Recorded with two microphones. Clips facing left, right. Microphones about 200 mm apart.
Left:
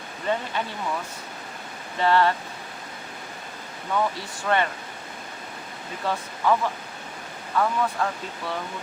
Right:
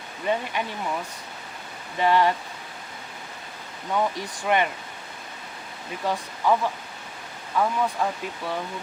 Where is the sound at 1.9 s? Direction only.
15° right (ahead or behind).